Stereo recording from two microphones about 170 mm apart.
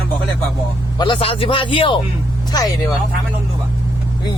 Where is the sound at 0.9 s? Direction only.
30° left (ahead or behind).